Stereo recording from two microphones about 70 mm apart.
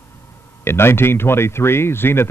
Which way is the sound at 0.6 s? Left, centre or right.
Left.